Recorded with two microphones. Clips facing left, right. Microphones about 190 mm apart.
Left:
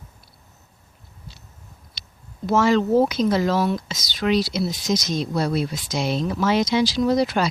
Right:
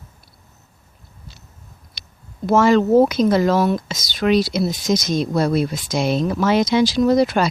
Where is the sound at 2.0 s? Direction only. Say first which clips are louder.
Right 1 dB; 50° right (ahead or behind).